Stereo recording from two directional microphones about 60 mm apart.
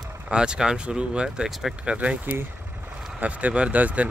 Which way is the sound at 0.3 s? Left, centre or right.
Centre.